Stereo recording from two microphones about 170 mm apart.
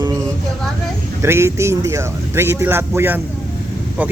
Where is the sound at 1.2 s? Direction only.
15° right (ahead or behind).